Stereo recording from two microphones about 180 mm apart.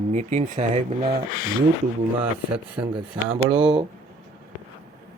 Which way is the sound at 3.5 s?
25° right (ahead or behind).